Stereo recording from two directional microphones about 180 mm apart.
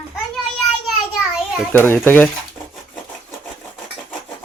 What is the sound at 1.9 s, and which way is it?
Speech, 10° left (ahead or behind).